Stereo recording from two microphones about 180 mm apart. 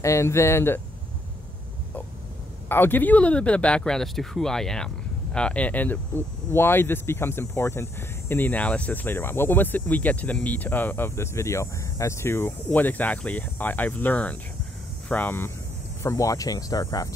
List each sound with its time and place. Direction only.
0.0 s speech: 15° left (ahead or behind)
2.7 s speech: 10° left (ahead or behind)